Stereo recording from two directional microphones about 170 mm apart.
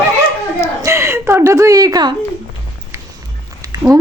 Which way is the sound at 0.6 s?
15° right (ahead or behind).